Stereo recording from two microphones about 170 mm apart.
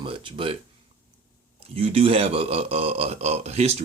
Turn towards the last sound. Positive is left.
turn(degrees=-40)  # may be behind; listen again after turning